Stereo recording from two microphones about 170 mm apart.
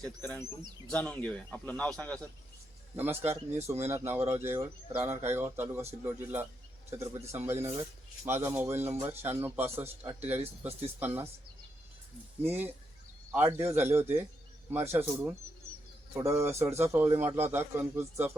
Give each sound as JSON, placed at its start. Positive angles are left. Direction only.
{"t": 0.0, "sound": "speech", "side_deg": 5}
{"t": 2.9, "sound": "speech", "side_deg": -10}
{"t": 10.7, "sound": "speech", "side_deg": -35}
{"t": 11.0, "sound": "speech", "side_deg": -10}
{"t": 12.4, "sound": "speech", "side_deg": -10}